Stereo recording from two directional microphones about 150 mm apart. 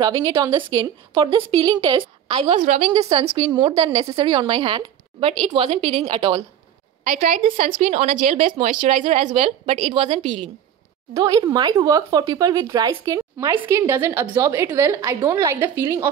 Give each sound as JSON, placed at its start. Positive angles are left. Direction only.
{"t": 0.0, "sound": "speech", "side_deg": -25}
{"t": 2.6, "sound": "a woman's voice", "side_deg": -55}
{"t": 2.9, "sound": "a woman's voice", "side_deg": -30}
{"t": 7.2, "sound": "a woman's voice", "side_deg": -65}
{"t": 7.5, "sound": "a woman's voice", "side_deg": -45}
{"t": 11.1, "sound": "speech", "side_deg": -25}